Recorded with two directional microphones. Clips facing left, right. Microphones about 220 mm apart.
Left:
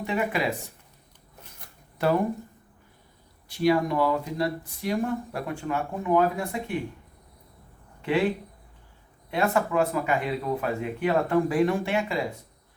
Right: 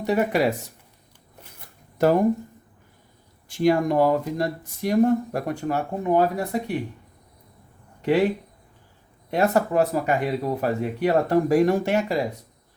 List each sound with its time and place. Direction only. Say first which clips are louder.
0.0 s speech: right 6 dB; 40° right (ahead or behind)
2.0 s speech: right 5 dB; 45° right (ahead or behind)
3.5 s speech: right 3 dB; 50° right (ahead or behind)
8.0 s speech: right 4 dB; 40° right (ahead or behind)
9.3 s speech: right 4 dB; 40° right (ahead or behind)